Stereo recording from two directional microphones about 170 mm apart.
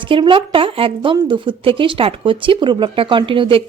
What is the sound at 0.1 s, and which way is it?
A woman's voice, 30° right (ahead or behind).